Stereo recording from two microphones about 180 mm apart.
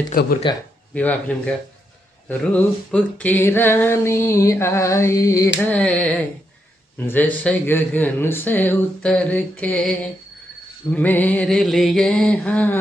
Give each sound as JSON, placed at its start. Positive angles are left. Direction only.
{"t": 0.1, "sound": "speech", "side_deg": 55}
{"t": 0.9, "sound": "a sound", "side_deg": 10}
{"t": 10.9, "sound": "mantra", "side_deg": 10}